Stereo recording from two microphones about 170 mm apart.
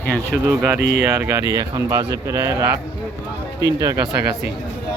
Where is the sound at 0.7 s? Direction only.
80° right.